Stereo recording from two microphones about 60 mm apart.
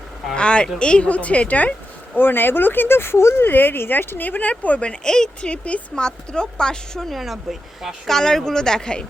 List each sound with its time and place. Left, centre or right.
0.3 s speech: centre
2.1 s speech: left; by 8.1 s centre
8.1 s speech: centre